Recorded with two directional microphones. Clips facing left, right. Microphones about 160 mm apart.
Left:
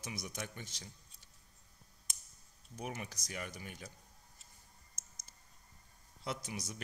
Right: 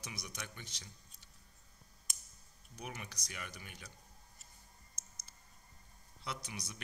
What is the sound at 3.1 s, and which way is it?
Speech, 45° left (ahead or behind).